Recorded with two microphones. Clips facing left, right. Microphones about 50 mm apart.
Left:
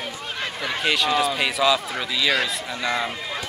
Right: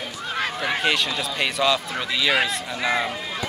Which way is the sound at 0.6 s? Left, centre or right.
Centre.